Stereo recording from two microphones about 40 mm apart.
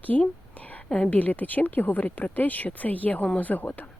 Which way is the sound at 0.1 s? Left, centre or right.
Left.